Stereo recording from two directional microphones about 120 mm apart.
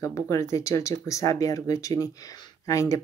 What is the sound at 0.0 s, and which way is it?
Speech, 25° left (ahead or behind).